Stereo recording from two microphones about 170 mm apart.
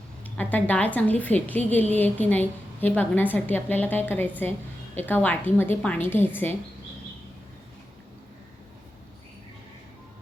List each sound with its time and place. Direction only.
0.3 s a woman's voice: 10° left (ahead or behind)